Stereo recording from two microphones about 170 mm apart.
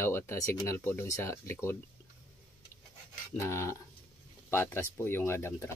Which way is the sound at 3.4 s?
15° left (ahead or behind).